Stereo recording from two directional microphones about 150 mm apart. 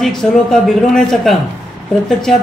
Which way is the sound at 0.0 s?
5° left (ahead or behind).